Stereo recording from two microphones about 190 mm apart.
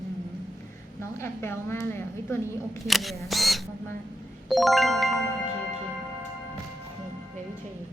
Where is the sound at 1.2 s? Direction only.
10° left (ahead or behind).